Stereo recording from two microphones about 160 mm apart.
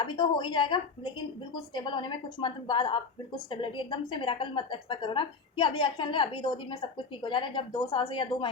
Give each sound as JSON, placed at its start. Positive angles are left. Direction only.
{"t": 0.0, "sound": "a woman's voice", "side_deg": 30}